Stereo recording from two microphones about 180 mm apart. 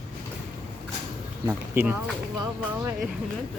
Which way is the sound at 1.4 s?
10° right (ahead or behind).